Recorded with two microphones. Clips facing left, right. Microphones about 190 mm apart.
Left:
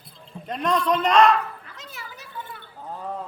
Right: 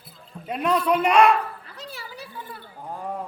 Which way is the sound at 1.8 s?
35° right (ahead or behind).